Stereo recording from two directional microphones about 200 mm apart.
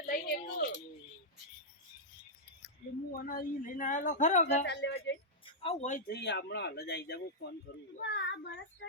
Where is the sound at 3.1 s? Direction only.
45° left (ahead or behind).